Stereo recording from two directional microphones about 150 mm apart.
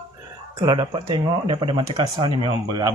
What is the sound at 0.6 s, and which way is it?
Speech, 30° right (ahead or behind).